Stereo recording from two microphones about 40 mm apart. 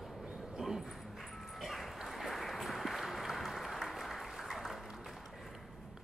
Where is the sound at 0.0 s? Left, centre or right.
Centre.